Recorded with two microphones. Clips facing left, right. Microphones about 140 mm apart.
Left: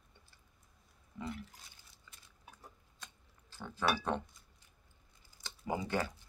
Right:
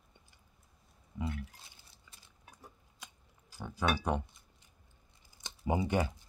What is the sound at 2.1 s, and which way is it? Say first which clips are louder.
Stir: left 1 dB; 15° right (ahead or behind).